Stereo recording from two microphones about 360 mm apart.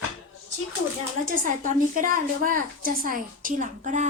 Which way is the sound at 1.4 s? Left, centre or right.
Right.